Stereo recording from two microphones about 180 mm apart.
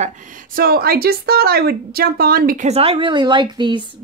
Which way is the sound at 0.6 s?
55° right (ahead or behind).